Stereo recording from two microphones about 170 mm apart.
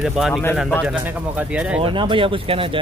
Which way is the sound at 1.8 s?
30° right (ahead or behind).